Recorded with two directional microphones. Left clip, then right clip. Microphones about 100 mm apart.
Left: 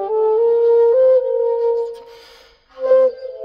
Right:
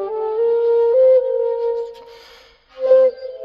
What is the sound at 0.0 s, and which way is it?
Music, 40° right (ahead or behind).